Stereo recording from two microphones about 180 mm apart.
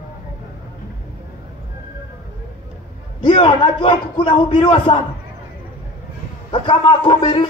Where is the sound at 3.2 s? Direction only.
25° left (ahead or behind).